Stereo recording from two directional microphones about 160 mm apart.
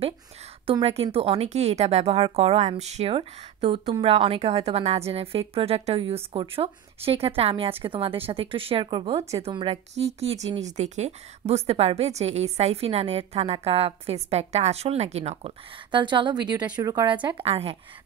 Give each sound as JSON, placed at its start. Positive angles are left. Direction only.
{"t": 0.7, "sound": "a woman's voice", "side_deg": -35}
{"t": 9.5, "sound": "a woman's voice", "side_deg": -30}
{"t": 9.9, "sound": "a woman's voice", "side_deg": -40}
{"t": 15.9, "sound": "a woman's voice", "side_deg": -30}